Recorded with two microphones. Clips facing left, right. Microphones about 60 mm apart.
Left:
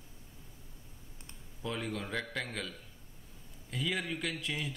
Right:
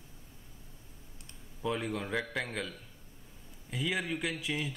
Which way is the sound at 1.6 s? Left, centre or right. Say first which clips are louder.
Right 4 dB; centre.